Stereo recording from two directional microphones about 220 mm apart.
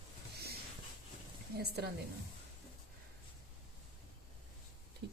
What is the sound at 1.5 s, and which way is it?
Speech, 45° right (ahead or behind).